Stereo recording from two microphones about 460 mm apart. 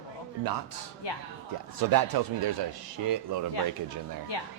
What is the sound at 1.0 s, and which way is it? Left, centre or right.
Speech, left.